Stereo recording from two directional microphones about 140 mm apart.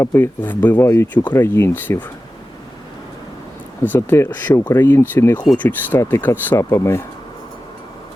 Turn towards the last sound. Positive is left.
turn(degrees=20)  # may be behind; listen again after turning